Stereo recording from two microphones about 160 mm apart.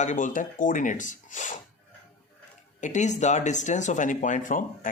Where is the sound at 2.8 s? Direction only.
45° left (ahead or behind).